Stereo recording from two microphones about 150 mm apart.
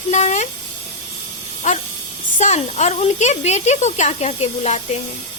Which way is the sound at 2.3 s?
50° left (ahead or behind).